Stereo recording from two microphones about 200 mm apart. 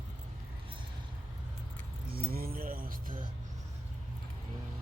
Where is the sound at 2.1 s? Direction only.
50° right (ahead or behind).